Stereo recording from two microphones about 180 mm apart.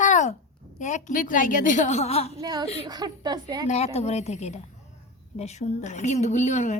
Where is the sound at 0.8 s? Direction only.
40° left (ahead or behind).